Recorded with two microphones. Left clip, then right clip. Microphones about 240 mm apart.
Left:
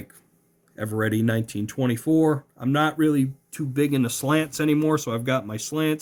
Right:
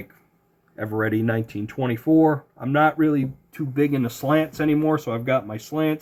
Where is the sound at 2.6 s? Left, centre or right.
Left.